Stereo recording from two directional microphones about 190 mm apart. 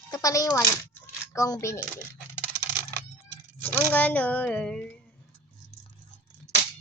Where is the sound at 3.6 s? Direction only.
10° left (ahead or behind).